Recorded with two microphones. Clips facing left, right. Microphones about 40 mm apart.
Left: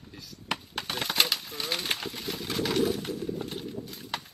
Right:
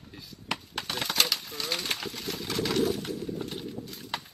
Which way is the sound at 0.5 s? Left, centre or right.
Centre.